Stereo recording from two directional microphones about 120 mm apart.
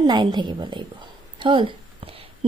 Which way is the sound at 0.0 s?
35° right (ahead or behind).